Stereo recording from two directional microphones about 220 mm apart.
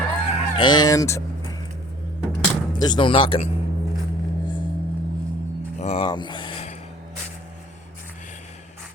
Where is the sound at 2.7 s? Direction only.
20° left (ahead or behind).